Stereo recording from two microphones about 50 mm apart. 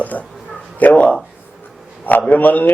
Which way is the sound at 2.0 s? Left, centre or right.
Left.